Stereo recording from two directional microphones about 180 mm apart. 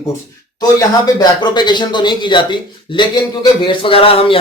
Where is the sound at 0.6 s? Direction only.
25° left (ahead or behind).